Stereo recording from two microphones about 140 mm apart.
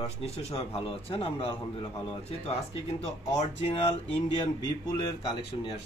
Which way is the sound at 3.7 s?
45° left (ahead or behind).